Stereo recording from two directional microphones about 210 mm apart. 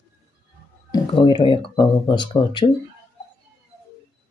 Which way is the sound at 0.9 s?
20° left (ahead or behind).